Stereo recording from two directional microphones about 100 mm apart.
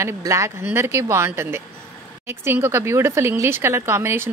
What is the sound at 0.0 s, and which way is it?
Speech, 30° right (ahead or behind).